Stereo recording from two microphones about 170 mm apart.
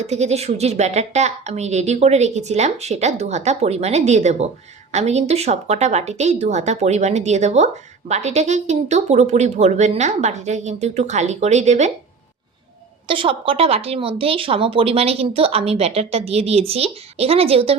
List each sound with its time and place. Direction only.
0.0 s a woman's voice: 40° right (ahead or behind)
13.1 s a woman's voice: 30° right (ahead or behind)